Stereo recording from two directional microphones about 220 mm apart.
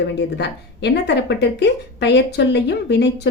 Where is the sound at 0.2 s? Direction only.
50° left (ahead or behind).